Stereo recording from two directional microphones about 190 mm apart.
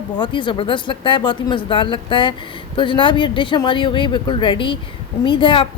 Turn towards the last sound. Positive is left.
turn(degrees=25)  # may be behind; listen again after turning